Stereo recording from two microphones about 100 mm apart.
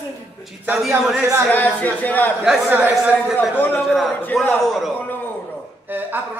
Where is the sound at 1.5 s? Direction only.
15° left (ahead or behind).